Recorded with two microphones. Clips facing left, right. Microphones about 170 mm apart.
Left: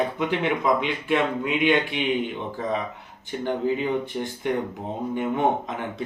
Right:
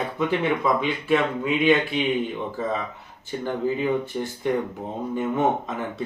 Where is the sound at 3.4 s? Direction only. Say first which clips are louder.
Even; 20° left (ahead or behind).